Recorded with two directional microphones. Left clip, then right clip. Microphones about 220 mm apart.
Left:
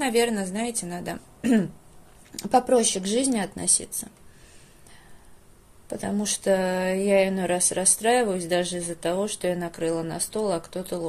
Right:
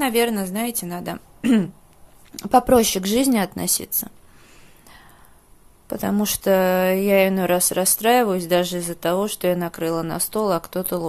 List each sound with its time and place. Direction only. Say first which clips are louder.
0.0 s a woman's voice: right 3 dB; 15° right (ahead or behind)
5.9 s speech: right 5 dB; 25° right (ahead or behind)